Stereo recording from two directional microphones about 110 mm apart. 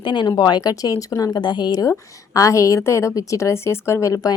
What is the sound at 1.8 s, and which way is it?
A woman's voice, 30° left (ahead or behind).